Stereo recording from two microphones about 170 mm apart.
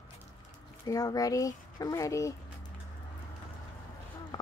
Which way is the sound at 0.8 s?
20° left (ahead or behind).